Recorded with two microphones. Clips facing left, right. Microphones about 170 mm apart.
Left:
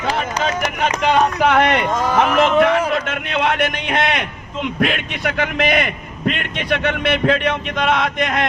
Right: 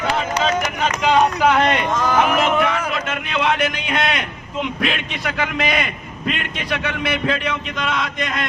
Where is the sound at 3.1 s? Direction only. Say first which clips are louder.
Left 1 dB; 55° left (ahead or behind).